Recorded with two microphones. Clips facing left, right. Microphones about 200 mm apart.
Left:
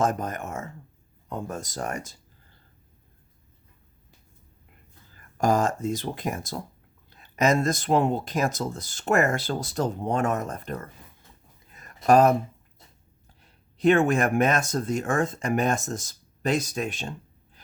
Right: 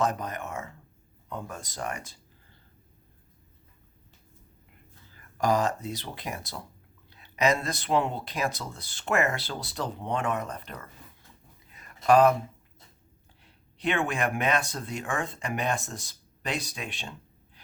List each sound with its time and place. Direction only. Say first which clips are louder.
0.0 s speech: left 3 dB; 45° left (ahead or behind)
5.4 s speech: left 3 dB; 45° left (ahead or behind)
11.7 s a sound: left 2 dB; 45° left (ahead or behind)
13.4 s speech: left 9 dB; 45° left (ahead or behind)